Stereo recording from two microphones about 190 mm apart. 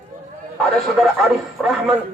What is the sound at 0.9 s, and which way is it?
Speech, centre (ahead or behind).